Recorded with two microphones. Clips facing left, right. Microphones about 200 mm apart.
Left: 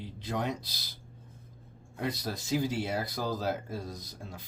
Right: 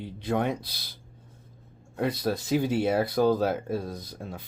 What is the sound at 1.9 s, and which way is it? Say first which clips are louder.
Speech: right 7 dB; 60° right (ahead or behind).